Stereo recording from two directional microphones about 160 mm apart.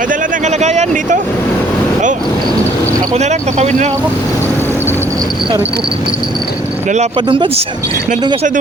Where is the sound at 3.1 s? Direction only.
45° right (ahead or behind).